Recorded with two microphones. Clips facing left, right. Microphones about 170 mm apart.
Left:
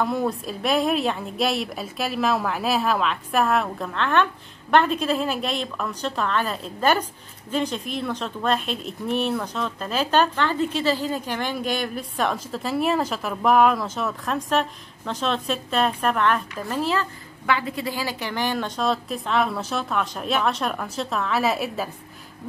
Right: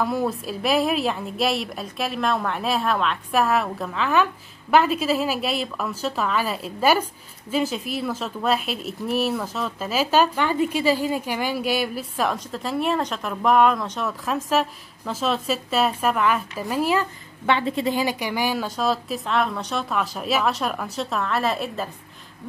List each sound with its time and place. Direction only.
0.0 s speech: centre (ahead or behind)
17.5 s speech: 25° right (ahead or behind); by 21.8 s 5° left (ahead or behind)